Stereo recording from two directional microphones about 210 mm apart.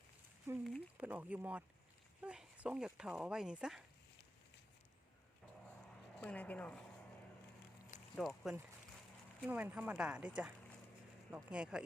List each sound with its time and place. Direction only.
0.6 s speech: 5° right (ahead or behind)
6.1 s speech: 5° left (ahead or behind)
8.1 s speech: centre (ahead or behind)